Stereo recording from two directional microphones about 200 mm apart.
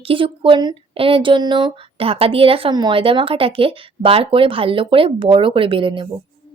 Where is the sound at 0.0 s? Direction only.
25° right (ahead or behind).